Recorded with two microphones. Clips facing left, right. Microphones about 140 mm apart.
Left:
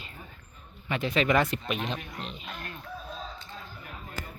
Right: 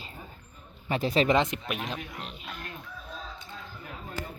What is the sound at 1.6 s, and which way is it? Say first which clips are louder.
Speech: left 2 dB; 5° right (ahead or behind).